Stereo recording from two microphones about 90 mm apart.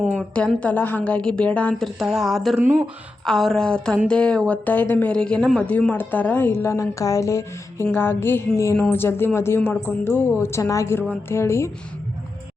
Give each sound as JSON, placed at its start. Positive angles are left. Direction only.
{"t": 0.2, "sound": "speech", "side_deg": 15}
{"t": 1.8, "sound": "a woman's voice", "side_deg": 0}